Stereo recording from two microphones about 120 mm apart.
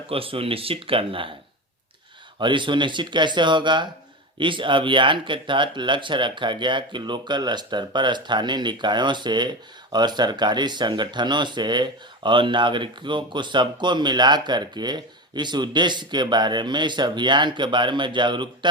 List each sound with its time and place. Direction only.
0.1 s speech: 50° right (ahead or behind)
2.4 s speech: 40° right (ahead or behind)